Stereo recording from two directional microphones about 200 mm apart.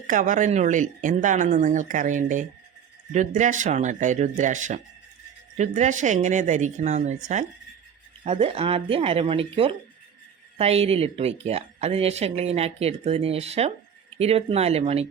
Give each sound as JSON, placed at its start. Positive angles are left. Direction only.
{"t": 0.1, "sound": "speech", "side_deg": -40}
{"t": 8.2, "sound": "speech", "side_deg": -30}